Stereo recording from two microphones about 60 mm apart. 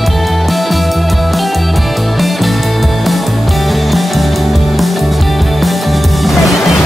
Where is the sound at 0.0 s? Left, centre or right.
Centre.